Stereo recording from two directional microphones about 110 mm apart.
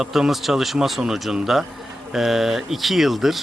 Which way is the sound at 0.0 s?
5° right (ahead or behind).